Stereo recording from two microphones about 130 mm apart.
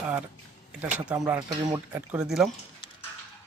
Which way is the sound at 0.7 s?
10° right (ahead or behind).